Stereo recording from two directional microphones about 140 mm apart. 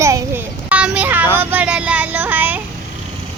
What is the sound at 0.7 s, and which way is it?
A child's voice, 10° right (ahead or behind).